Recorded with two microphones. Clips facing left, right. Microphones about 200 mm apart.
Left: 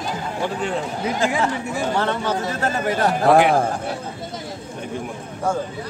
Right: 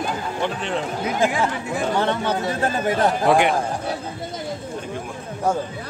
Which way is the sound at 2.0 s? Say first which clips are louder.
Right 1 dB; 15° right (ahead or behind).